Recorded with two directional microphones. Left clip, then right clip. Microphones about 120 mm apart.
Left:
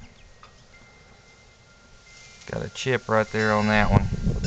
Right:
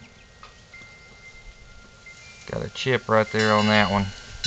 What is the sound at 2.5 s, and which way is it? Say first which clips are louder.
Speech: right 2 dB; 35° left (ahead or behind).